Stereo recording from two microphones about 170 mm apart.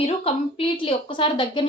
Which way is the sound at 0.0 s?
35° left (ahead or behind).